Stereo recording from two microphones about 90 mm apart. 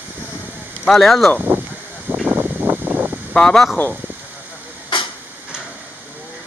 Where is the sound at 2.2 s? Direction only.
20° right (ahead or behind).